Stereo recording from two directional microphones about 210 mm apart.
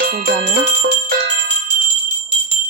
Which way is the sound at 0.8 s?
50° right (ahead or behind).